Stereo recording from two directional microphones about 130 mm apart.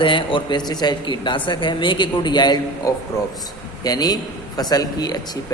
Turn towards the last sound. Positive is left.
turn(degrees=30)  # may be behind; listen again after turning